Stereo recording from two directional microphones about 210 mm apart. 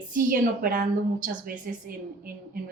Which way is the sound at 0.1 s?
40° right (ahead or behind).